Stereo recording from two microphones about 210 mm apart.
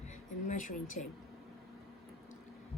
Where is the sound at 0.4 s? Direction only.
40° left (ahead or behind).